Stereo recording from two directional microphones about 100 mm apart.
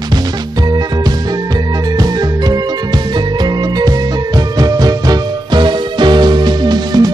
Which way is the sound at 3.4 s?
45° right (ahead or behind).